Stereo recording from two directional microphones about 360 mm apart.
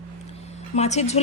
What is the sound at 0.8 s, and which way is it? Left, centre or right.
Speech, centre.